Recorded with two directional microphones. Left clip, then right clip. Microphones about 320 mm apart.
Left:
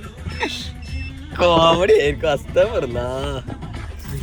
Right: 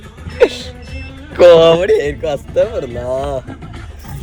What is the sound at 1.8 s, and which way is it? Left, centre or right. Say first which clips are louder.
Speech: right 1 dB; centre.